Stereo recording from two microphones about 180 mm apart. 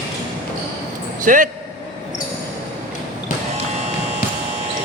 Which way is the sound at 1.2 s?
45° right (ahead or behind).